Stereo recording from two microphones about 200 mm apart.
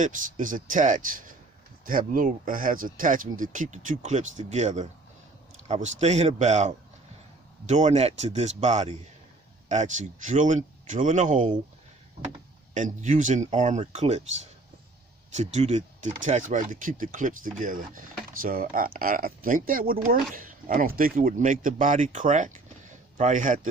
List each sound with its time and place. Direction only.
0.0 s speech: 40° right (ahead or behind)
12.7 s speech: 40° right (ahead or behind)
15.4 s speech: 35° right (ahead or behind)